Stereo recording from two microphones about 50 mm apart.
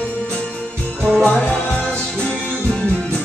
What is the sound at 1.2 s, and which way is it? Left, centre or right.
Music, centre.